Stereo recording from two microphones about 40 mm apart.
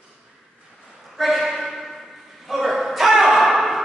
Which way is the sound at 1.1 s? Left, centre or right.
Centre.